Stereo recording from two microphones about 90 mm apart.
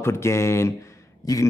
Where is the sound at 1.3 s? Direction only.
45° left (ahead or behind).